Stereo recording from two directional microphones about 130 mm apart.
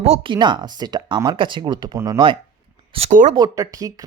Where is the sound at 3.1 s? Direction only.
85° right.